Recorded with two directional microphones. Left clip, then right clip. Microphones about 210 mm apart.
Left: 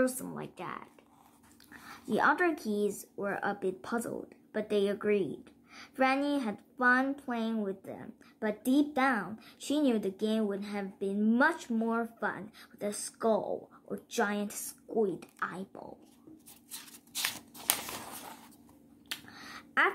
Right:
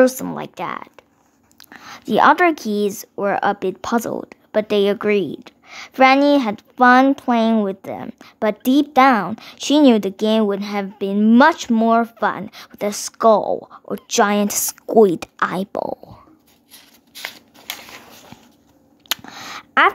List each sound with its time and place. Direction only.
0.0 s speech: 40° right (ahead or behind)
16.7 s shuffling cards: 25° left (ahead or behind)
19.0 s a sound: 45° right (ahead or behind)